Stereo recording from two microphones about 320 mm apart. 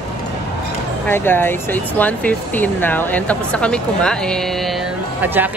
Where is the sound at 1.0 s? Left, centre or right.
Centre.